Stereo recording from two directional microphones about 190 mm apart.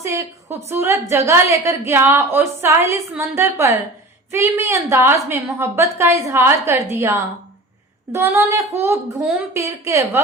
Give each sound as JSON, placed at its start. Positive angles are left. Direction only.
{"t": 0.0, "sound": "a woman's voice", "side_deg": -15}